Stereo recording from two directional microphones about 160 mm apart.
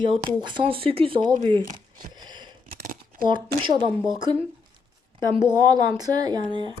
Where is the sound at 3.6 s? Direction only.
30° right (ahead or behind).